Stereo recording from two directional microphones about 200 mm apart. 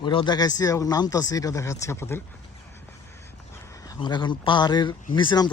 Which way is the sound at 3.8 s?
20° left (ahead or behind).